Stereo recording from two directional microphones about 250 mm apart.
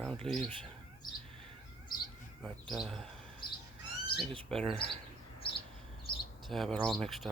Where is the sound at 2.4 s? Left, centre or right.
Centre.